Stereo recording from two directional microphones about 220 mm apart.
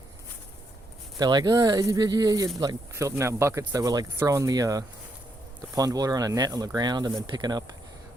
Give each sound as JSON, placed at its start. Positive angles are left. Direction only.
{"t": 1.2, "sound": "speech", "side_deg": -20}